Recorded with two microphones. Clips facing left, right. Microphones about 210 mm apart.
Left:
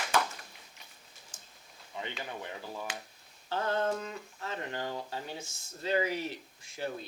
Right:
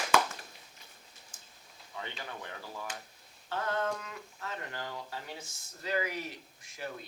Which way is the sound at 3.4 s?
30° left (ahead or behind).